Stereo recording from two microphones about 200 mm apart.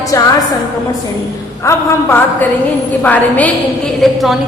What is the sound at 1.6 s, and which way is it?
A woman's voice, 10° left (ahead or behind).